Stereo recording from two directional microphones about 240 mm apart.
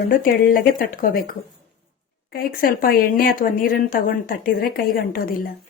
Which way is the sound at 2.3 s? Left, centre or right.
Left.